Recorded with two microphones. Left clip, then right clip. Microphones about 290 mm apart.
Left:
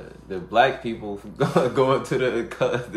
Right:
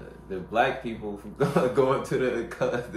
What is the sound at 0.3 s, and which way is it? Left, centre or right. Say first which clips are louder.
Speech: left 5 dB; left.